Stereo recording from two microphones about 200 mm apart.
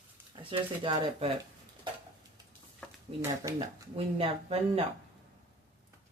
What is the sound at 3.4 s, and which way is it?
Speech, 15° right (ahead or behind).